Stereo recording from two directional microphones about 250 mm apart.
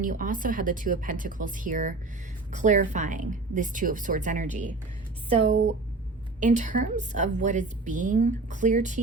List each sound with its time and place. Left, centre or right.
0.0 s a woman's voice: right
6.4 s a woman's voice: right